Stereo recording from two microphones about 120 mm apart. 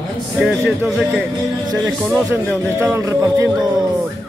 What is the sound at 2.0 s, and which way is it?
A man's voice, 20° right (ahead or behind).